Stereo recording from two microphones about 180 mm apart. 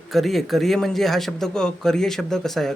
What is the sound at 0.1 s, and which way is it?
Speech, centre (ahead or behind).